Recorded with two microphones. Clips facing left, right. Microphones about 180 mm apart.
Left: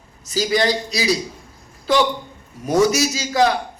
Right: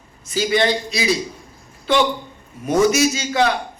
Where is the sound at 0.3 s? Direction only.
40° left (ahead or behind).